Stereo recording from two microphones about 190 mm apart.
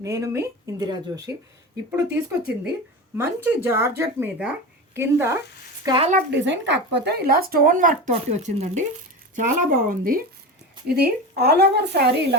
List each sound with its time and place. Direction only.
0.0 s speech: 15° right (ahead or behind)
3.2 s speech: 15° right (ahead or behind)
5.8 s speech: 25° right (ahead or behind)
6.3 s a woman's voice: 70° right (ahead or behind)